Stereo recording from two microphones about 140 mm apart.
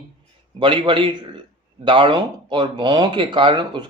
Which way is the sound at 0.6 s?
35° right (ahead or behind).